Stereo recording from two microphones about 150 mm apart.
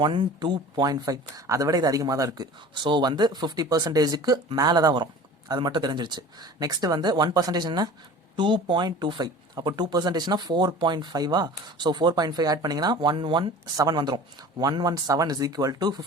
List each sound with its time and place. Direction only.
0.0 s speech: 30° right (ahead or behind)